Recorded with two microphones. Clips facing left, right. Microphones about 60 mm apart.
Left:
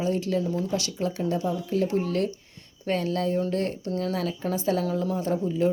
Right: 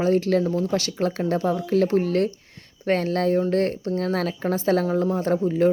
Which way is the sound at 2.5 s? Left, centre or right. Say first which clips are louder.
Right 5 dB; right.